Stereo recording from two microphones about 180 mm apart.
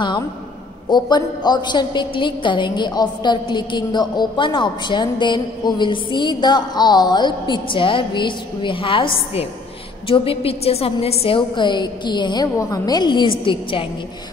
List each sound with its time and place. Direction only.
0.8 s a woman's voice: 25° left (ahead or behind)